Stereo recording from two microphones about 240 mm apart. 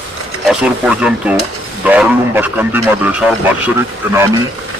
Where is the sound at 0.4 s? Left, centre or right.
Centre.